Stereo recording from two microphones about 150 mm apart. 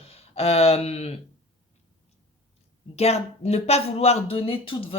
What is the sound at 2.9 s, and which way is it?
Speech, 45° left (ahead or behind).